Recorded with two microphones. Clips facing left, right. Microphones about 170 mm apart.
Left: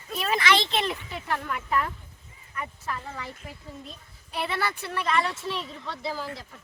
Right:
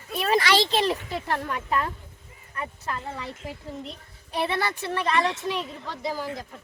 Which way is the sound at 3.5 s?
90° right.